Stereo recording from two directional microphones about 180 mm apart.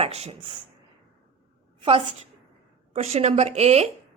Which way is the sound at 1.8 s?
30° right (ahead or behind).